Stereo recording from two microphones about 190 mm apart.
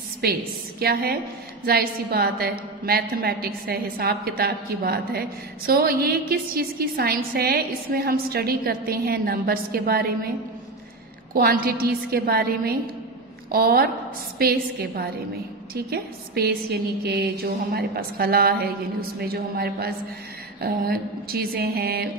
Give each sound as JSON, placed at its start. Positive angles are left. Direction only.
{"t": 0.2, "sound": "a woman's voice", "side_deg": -55}
{"t": 11.3, "sound": "a woman's voice", "side_deg": -50}